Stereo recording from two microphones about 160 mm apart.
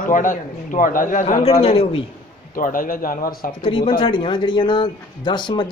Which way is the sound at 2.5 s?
60° left (ahead or behind).